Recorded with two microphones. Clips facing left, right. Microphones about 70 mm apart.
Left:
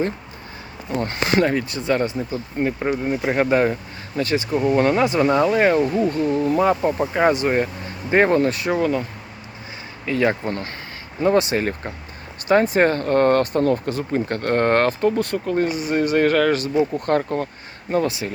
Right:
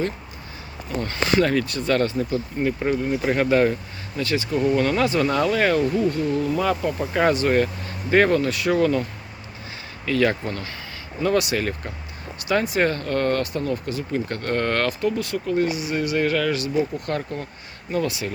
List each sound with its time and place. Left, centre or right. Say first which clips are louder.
1.0 s speech: left 1 dB; left
7.1 s speech: right 1 dB; centre
8.8 s speech: even; centre
10.1 s speech: left 1 dB; left